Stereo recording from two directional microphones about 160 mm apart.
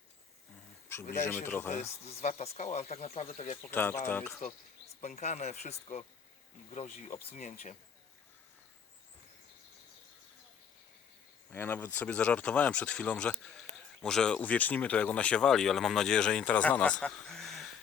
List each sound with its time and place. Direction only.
1.5 s speech: 15° left (ahead or behind)
1.7 s speech: 45° left (ahead or behind)
3.7 s speech: 15° left (ahead or behind)
4.9 s speech: 45° left (ahead or behind)
11.5 s speech: 10° left (ahead or behind)